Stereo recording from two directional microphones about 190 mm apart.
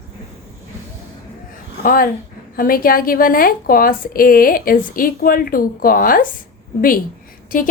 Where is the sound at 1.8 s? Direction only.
50° left (ahead or behind).